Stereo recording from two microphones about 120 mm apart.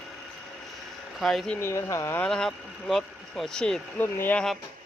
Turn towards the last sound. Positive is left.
turn(degrees=15)  # may be behind; listen again after turning